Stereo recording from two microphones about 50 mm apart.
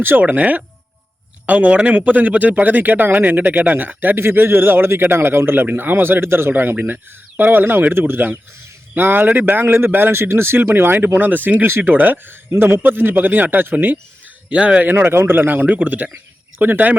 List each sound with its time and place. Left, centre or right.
0.2 s a man's voice: right
6.5 s a man's voice: right
14.5 s speech: right
14.8 s speech: right
15.4 s a man's voice: right